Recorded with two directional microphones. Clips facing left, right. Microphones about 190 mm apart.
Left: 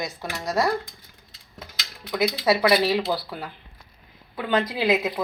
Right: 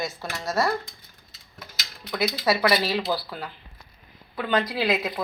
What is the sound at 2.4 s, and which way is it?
Speech, 15° left (ahead or behind).